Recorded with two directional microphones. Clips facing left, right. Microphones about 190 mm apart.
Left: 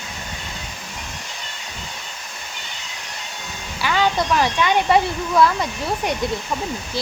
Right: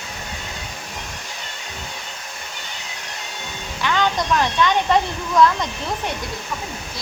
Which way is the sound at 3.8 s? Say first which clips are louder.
Left 1 dB; 5° left (ahead or behind).